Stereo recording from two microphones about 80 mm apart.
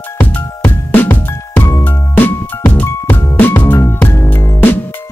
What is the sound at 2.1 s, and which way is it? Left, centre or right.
Music, left.